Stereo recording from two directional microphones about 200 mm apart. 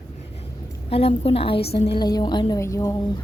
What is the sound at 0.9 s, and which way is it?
Speech, 30° left (ahead or behind).